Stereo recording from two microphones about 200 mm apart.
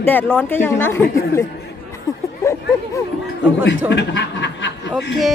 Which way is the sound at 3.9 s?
60° left (ahead or behind).